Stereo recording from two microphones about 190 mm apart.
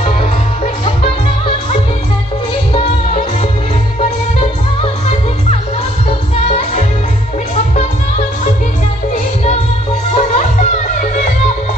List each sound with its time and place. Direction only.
6.5 s music: 35° left (ahead or behind)
9.1 s music: 35° left (ahead or behind)